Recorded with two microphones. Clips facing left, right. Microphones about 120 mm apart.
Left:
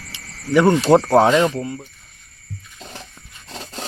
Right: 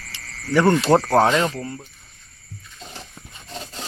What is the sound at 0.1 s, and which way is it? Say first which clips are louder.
Cricket: left 4 dB; 15° left (ahead or behind).